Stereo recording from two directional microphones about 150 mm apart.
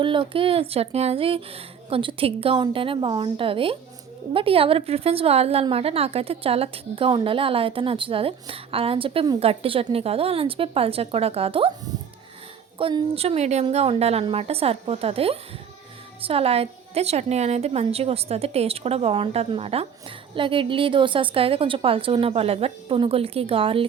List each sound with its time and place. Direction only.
0.0 s a woman's voice: 35° right (ahead or behind)
12.8 s a woman's voice: 40° right (ahead or behind)